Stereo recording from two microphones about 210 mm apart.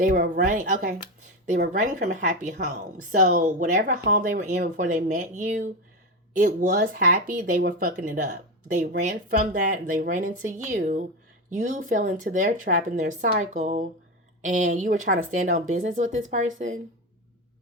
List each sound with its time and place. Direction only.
0.0 s speech: 40° right (ahead or behind)